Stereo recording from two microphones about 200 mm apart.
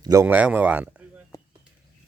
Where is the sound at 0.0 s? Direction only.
15° right (ahead or behind).